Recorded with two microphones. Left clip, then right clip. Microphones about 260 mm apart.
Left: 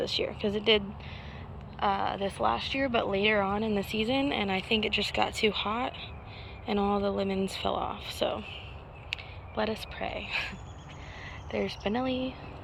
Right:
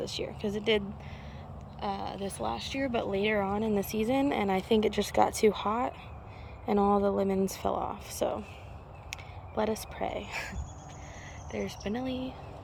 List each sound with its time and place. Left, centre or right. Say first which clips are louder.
0.0 s speech: left 5 dB; centre
6.7 s a sound: right 2 dB; centre
7.6 s speech: left 1 dB; centre
9.6 s speech: right 1 dB; centre